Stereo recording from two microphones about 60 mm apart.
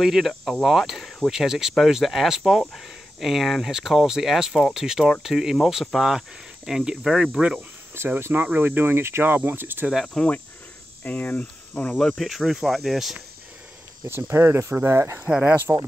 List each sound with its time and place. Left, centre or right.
0.0 s speech: centre
0.5 s cricket: centre
1.3 s speech: centre
7.9 s speech: right
10.0 s cricket: centre
11.1 s cricket: left
12.2 s speech: centre
14.3 s speech: right
15.7 s speech: right